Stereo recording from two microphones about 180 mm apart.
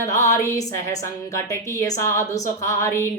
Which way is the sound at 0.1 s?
15° left (ahead or behind).